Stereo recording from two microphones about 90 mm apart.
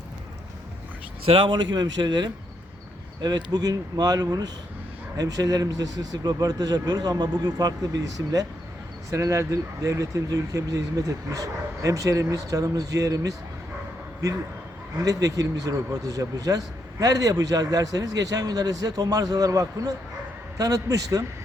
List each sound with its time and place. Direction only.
1.3 s a man's voice: 65° right (ahead or behind); by 13.3 s 40° right (ahead or behind)
14.9 s speech: 45° right (ahead or behind)